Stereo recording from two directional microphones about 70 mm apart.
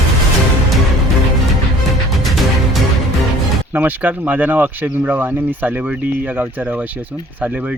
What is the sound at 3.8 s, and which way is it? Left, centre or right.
Speech, right.